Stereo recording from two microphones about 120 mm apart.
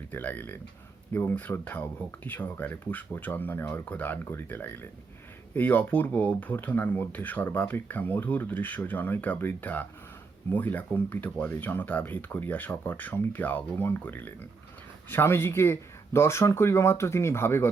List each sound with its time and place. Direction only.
0.1 s speech: 15° left (ahead or behind)